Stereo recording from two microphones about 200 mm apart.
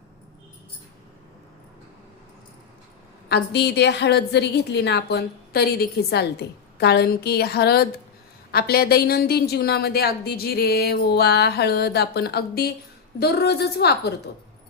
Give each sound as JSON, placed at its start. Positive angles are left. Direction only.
{"t": 3.2, "sound": "a woman's voice", "side_deg": 55}